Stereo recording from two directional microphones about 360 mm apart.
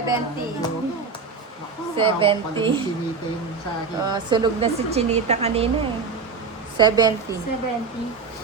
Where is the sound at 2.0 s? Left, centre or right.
Centre.